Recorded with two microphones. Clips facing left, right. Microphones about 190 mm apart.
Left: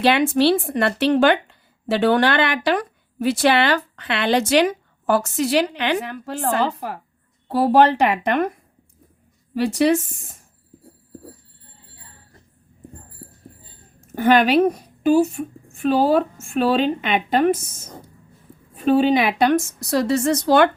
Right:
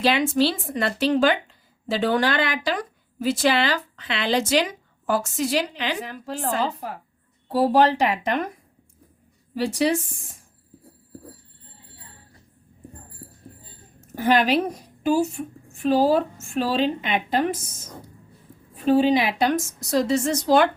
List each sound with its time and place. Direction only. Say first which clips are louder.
0.0 s speech: left 4 dB; 65° left (ahead or behind)
9.6 s speech: left 4 dB; 60° left (ahead or behind)
14.2 s a woman's voice: left 5 dB; 60° left (ahead or behind)
18.9 s speech: left 2 dB; 60° left (ahead or behind)